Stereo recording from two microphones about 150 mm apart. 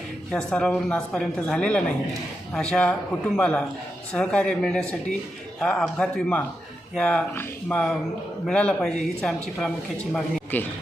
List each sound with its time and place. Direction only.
0.3 s a man's voice: 5° left (ahead or behind)